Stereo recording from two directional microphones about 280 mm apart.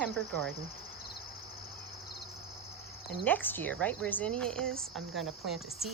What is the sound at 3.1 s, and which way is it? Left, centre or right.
Speech, centre.